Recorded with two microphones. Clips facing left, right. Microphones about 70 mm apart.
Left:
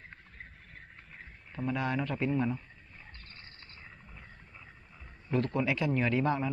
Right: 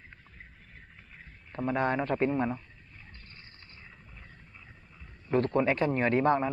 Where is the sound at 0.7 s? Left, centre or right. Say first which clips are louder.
Left 1 dB; centre.